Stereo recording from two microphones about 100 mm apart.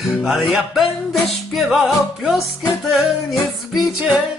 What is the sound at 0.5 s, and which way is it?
Music, centre (ahead or behind).